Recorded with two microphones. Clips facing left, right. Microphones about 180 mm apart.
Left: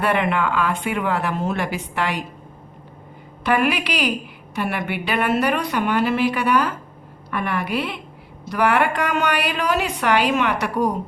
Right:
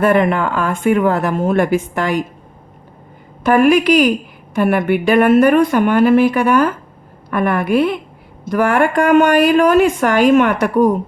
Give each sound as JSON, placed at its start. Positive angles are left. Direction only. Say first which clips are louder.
{"t": 0.0, "sound": "a woman's voice", "louder": "right 7 dB", "side_deg": -45}
{"t": 3.4, "sound": "a woman's voice", "louder": "right 9 dB", "side_deg": -45}